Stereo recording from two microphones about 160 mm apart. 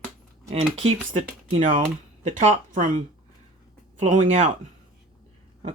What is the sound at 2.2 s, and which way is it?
Speech, 50° right (ahead or behind).